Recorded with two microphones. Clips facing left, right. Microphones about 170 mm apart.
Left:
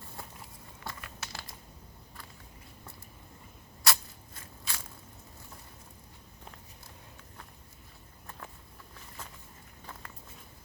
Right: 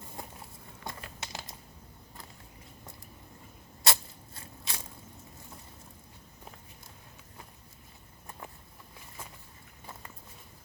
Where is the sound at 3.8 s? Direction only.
25° right (ahead or behind).